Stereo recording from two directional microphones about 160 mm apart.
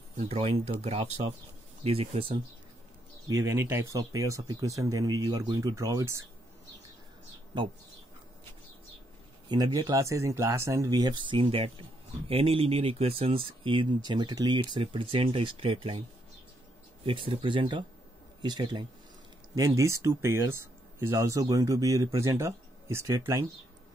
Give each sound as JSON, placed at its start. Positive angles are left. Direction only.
{"t": 0.2, "sound": "speech", "side_deg": -35}
{"t": 3.3, "sound": "speech", "side_deg": -20}
{"t": 9.5, "sound": "speech", "side_deg": -25}
{"t": 17.0, "sound": "speech", "side_deg": -35}